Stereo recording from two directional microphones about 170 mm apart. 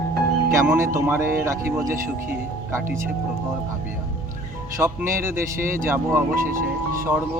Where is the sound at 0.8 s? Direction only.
15° right (ahead or behind).